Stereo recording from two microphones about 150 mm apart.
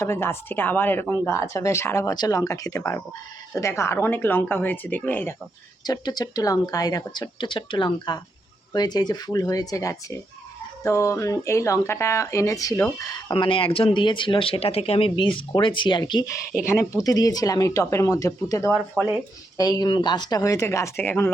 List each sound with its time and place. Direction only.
0.0 s a woman's voice: 15° left (ahead or behind)
5.8 s speech: 25° left (ahead or behind)